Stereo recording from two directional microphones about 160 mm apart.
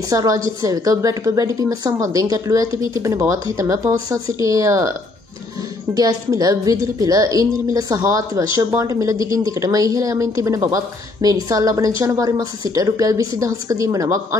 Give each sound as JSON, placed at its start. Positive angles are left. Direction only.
{"t": 0.1, "sound": "a woman's voice", "side_deg": -20}
{"t": 5.9, "sound": "a woman's voice", "side_deg": -20}